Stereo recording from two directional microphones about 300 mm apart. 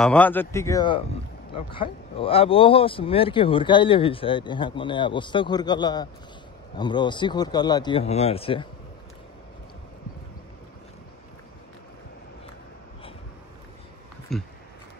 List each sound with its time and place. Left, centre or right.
0.0 s speech: centre
14.3 s speech: centre